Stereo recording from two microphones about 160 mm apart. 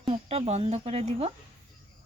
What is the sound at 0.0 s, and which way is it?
Speech, 40° right (ahead or behind).